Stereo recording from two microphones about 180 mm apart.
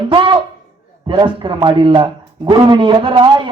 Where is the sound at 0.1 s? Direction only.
25° right (ahead or behind).